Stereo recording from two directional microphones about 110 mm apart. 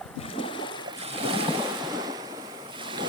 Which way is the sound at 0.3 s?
50° left (ahead or behind).